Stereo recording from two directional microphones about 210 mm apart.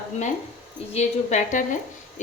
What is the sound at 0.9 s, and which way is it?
A woman's voice, 35° left (ahead or behind).